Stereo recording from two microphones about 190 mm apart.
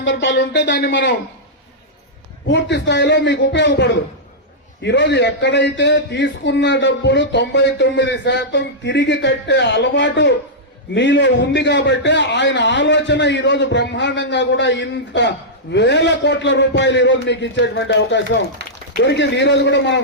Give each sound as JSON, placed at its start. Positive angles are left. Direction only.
{"t": 0.0, "sound": "a man's voice", "side_deg": 70}
{"t": 2.5, "sound": "a man's voice", "side_deg": 65}